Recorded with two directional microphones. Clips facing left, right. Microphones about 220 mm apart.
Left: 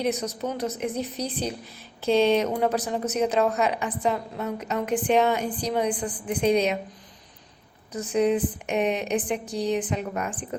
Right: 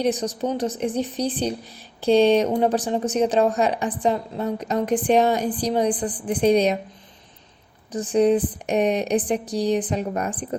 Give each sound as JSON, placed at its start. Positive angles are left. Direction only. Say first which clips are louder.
{"t": 0.0, "sound": "a woman's voice", "louder": "right 4 dB", "side_deg": -30}
{"t": 7.9, "sound": "a woman's voice", "louder": "right 4 dB", "side_deg": -35}